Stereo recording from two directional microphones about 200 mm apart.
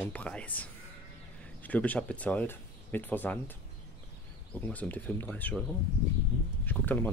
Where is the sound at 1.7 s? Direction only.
5° left (ahead or behind).